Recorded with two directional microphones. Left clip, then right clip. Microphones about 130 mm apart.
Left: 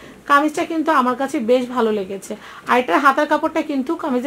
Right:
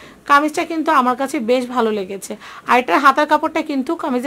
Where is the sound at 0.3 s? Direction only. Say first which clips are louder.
Right 2 dB; 45° right (ahead or behind).